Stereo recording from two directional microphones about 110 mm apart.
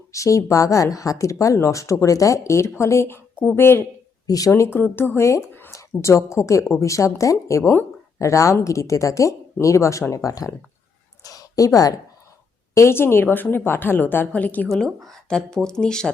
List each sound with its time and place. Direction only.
0.1 s speech: 30° left (ahead or behind)
4.3 s speech: 35° left (ahead or behind); by 14.7 s 15° left (ahead or behind)
14.7 s speech: centre (ahead or behind)